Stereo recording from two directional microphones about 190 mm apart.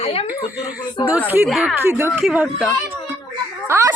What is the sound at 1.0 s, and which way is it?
Speech, 10° right (ahead or behind).